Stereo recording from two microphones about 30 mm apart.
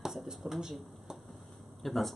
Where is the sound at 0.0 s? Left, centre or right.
Centre.